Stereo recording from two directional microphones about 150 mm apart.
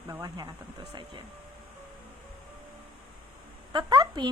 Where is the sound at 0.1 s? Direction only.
30° right (ahead or behind).